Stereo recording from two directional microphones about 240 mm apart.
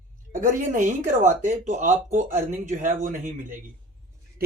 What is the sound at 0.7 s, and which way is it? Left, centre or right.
Speech, right.